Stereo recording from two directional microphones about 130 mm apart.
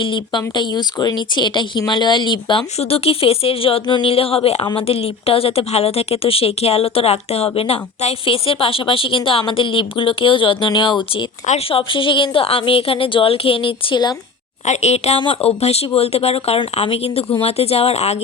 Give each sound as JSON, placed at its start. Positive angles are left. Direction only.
{"t": 0.0, "sound": "speech", "side_deg": 40}
{"t": 2.7, "sound": "a woman's voice", "side_deg": 50}
{"t": 4.6, "sound": "speech", "side_deg": 35}
{"t": 4.9, "sound": "a woman's voice", "side_deg": 50}
{"t": 11.4, "sound": "a woman's voice", "side_deg": 50}
{"t": 14.7, "sound": "a woman's voice", "side_deg": 60}